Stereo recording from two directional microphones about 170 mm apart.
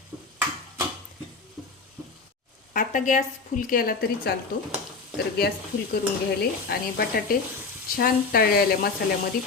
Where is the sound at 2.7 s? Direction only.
50° left (ahead or behind).